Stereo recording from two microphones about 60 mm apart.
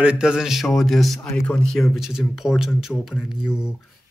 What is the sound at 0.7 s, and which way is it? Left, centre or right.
Speech, centre.